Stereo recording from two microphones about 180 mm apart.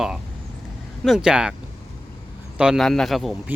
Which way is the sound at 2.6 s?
Centre (ahead or behind).